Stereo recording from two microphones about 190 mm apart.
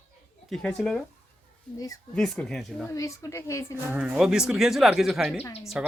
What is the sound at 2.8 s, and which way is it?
Speech, 15° left (ahead or behind).